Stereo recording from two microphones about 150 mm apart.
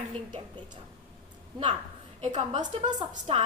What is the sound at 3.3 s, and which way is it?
Speech, 40° right (ahead or behind).